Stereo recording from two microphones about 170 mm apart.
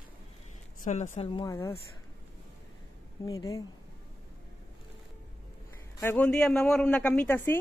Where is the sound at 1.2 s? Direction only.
30° left (ahead or behind).